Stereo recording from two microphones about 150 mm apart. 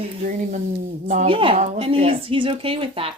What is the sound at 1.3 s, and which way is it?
Speech, 35° right (ahead or behind).